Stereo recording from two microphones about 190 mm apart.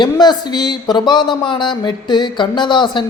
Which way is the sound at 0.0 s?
20° left (ahead or behind).